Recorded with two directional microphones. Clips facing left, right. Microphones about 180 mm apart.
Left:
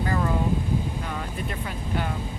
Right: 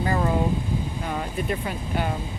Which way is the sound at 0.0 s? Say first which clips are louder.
Right 2 dB; 20° right (ahead or behind).